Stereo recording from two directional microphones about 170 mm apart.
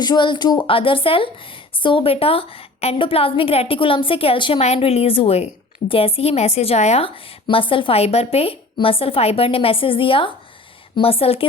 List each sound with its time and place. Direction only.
0.0 s a woman's voice: 25° left (ahead or behind)